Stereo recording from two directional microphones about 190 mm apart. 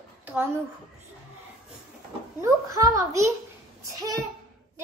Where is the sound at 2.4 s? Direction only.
20° right (ahead or behind).